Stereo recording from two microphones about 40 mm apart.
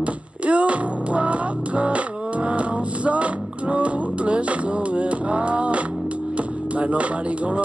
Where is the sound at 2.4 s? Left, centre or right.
Right.